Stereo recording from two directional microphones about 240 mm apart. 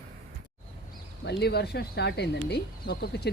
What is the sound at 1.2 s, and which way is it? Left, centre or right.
Speech, left.